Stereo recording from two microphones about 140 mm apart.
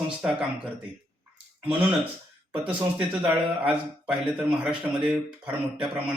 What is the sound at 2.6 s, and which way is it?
Speech, 40° right (ahead or behind).